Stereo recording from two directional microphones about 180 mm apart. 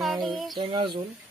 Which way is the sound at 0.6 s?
25° right (ahead or behind).